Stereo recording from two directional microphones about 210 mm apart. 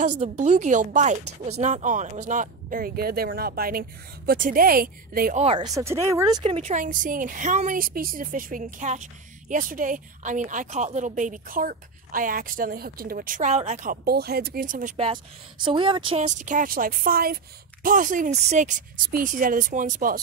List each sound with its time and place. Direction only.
0.2 s a woman's voice: 35° right (ahead or behind)
5.4 s a woman's voice: 30° right (ahead or behind)
14.0 s speech: 50° right (ahead or behind)
15.6 s a woman's voice: 25° right (ahead or behind); by 20.2 s 40° right (ahead or behind)